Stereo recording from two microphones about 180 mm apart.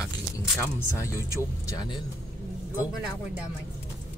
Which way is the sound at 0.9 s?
15° left (ahead or behind).